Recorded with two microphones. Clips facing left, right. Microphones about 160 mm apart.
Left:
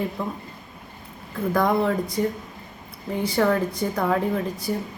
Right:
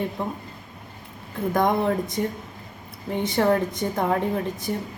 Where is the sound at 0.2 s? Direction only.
25° right (ahead or behind).